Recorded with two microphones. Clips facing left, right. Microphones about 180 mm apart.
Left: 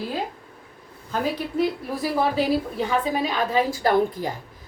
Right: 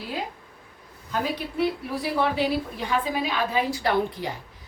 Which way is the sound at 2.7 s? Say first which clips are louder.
Left 3 dB; 45° left (ahead or behind).